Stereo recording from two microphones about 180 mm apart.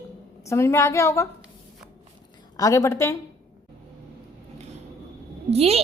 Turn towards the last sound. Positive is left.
turn(degrees=-35)  # may be behind; listen again after turning